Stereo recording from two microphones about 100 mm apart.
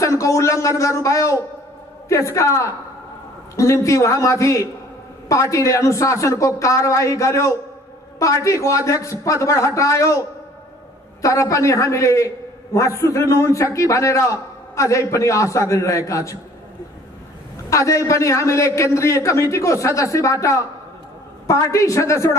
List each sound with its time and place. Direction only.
0.0 s a man's voice: 30° left (ahead or behind)
17.6 s a man's voice: 30° left (ahead or behind)